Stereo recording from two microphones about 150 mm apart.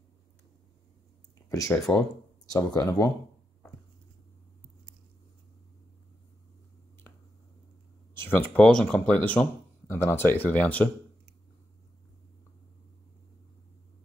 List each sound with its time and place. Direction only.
1.5 s speech: 20° left (ahead or behind)
8.2 s speech: 10° left (ahead or behind)